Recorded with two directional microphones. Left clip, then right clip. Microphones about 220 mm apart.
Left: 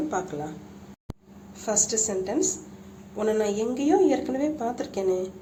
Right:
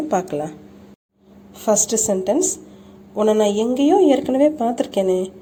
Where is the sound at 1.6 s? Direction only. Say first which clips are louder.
Right 8 dB; 35° right (ahead or behind).